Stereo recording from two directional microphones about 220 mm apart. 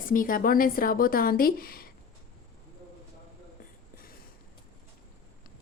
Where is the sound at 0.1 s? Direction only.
40° left (ahead or behind).